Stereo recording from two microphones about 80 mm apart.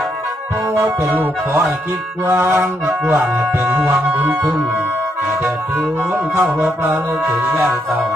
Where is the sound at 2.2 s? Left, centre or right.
Right.